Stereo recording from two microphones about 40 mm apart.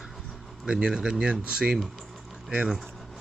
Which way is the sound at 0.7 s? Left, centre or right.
Right.